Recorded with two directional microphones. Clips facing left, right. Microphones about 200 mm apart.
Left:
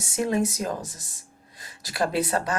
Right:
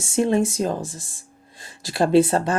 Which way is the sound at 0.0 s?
25° right (ahead or behind).